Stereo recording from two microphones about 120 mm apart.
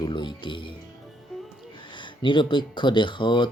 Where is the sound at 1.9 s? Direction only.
40° left (ahead or behind).